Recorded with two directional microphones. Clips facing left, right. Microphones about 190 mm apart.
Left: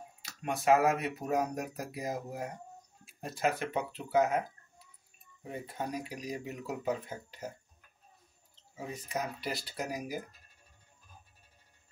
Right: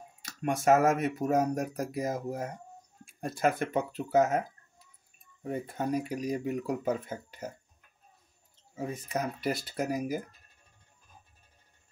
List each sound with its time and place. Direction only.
0.2 s speech: 50° right (ahead or behind)
8.7 s speech: 50° right (ahead or behind)